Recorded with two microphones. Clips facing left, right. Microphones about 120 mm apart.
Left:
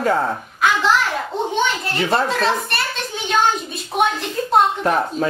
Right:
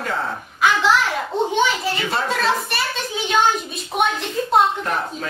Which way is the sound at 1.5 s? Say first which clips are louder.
Right 1 dB; centre (ahead or behind).